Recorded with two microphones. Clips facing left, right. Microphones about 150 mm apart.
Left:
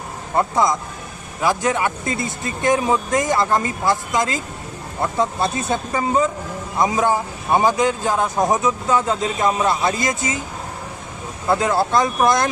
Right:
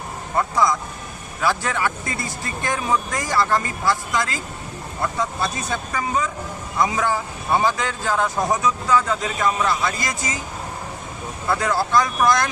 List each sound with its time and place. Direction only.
0.3 s speech: 25° left (ahead or behind)
11.4 s speech: 20° left (ahead or behind)